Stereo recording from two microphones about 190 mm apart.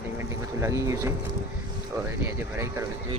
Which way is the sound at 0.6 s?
15° right (ahead or behind).